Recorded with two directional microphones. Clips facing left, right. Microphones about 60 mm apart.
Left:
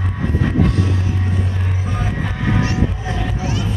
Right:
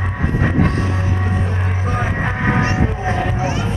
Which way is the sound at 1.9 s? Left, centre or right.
Right.